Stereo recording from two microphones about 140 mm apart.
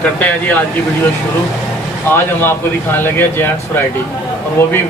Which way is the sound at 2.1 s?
15° left (ahead or behind).